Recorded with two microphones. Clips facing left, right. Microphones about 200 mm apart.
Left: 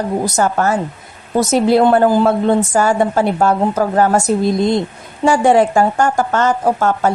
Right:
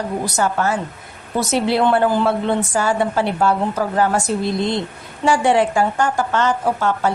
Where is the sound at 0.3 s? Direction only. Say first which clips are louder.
Left 3 dB; 45° left (ahead or behind).